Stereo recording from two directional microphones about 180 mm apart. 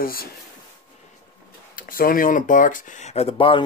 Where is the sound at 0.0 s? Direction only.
55° left (ahead or behind).